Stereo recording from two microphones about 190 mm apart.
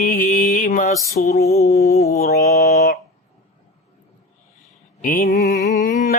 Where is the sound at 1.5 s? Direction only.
15° left (ahead or behind).